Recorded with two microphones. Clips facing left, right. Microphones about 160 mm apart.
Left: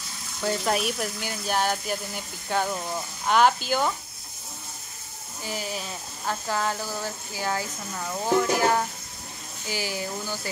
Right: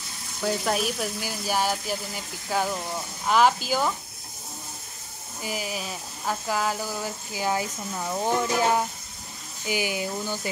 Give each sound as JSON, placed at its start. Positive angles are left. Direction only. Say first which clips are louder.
{"t": 0.4, "sound": "speech", "louder": "even", "side_deg": 0}
{"t": 5.4, "sound": "speech", "louder": "right 1 dB", "side_deg": -10}